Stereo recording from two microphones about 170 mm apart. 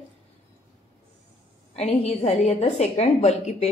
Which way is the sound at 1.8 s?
40° left (ahead or behind).